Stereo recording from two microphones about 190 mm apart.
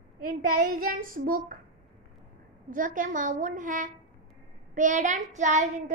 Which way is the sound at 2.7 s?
45° right (ahead or behind).